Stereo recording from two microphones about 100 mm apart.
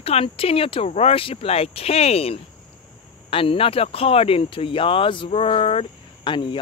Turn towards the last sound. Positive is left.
turn(degrees=55)  # may be behind; listen again after turning